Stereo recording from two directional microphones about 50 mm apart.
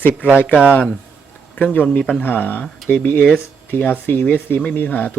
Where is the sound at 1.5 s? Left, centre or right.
Left.